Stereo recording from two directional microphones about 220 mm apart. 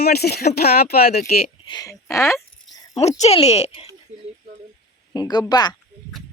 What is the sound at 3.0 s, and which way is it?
Speech, 30° left (ahead or behind).